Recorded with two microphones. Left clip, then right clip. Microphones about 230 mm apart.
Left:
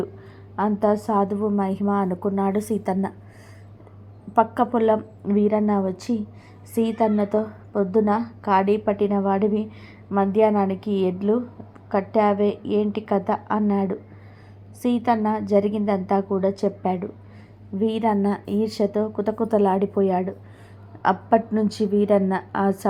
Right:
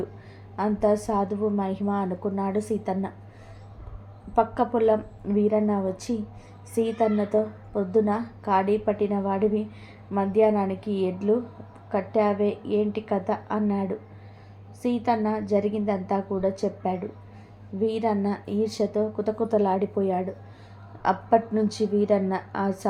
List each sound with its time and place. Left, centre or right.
0.5 s a woman's voice: centre
4.4 s a woman's voice: centre